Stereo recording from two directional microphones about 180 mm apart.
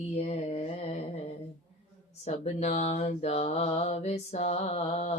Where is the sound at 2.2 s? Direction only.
35° left (ahead or behind).